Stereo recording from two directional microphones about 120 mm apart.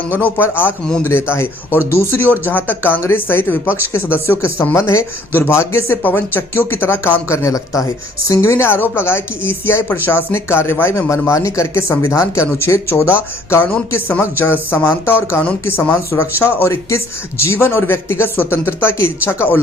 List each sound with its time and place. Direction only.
0.1 s speech: 15° left (ahead or behind)